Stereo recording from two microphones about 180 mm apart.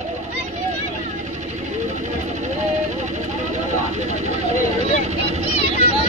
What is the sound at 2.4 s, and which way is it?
Vehicle, 40° right (ahead or behind).